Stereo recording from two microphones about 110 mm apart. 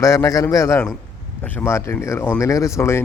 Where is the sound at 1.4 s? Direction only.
20° left (ahead or behind).